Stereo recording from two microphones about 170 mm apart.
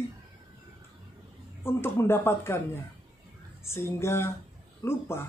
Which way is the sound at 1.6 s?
15° left (ahead or behind).